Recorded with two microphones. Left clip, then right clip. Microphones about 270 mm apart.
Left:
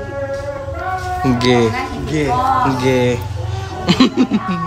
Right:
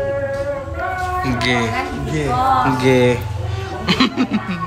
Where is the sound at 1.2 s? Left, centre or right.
Centre.